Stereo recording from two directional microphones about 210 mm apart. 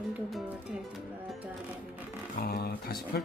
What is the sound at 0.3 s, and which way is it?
Music, centre (ahead or behind).